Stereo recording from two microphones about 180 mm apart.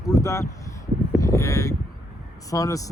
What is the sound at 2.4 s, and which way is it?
Speech, 20° left (ahead or behind).